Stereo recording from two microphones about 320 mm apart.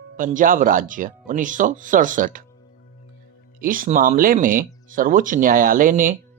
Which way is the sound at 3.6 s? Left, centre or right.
Right.